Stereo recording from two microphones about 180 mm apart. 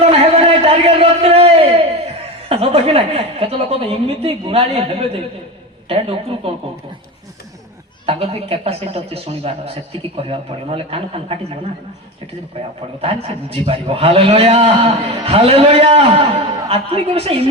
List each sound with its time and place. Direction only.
0.0 s a sound: 35° right (ahead or behind)
2.5 s a man's voice: 35° right (ahead or behind)
8.0 s a man's voice: 30° right (ahead or behind)
12.6 s a man's voice: 30° right (ahead or behind)